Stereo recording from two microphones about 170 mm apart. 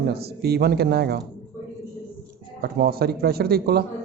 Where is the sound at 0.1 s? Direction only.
70° right (ahead or behind).